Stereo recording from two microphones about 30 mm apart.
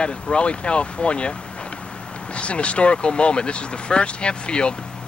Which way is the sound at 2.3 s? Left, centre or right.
Left.